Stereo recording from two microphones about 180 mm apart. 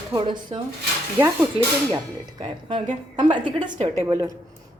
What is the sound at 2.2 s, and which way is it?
A woman's voice, 25° right (ahead or behind).